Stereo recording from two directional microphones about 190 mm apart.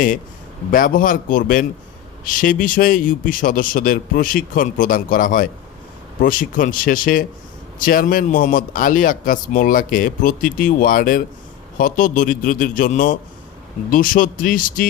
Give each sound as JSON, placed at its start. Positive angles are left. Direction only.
{"t": 0.7, "sound": "speech", "side_deg": 45}